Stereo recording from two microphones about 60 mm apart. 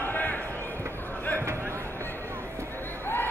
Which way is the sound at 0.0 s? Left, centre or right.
Left.